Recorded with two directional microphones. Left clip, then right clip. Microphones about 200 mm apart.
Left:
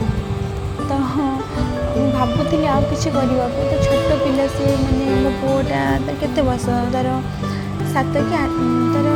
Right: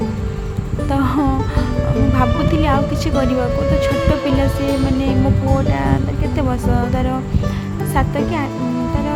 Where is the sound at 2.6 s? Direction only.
15° right (ahead or behind).